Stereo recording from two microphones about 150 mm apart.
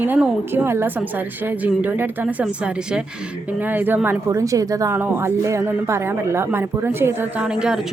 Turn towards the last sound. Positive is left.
turn(degrees=-5)  # may be behind; listen again after turning